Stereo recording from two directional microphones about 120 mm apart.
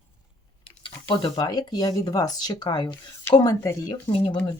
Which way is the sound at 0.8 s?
45° left (ahead or behind).